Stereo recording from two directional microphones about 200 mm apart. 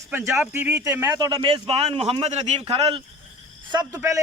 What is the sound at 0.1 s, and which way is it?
A man's voice, 10° right (ahead or behind).